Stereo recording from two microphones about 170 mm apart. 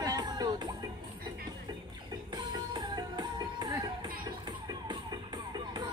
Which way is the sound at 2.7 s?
25° right (ahead or behind).